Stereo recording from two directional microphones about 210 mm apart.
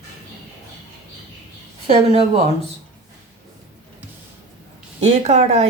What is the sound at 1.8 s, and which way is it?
Speech, 30° right (ahead or behind).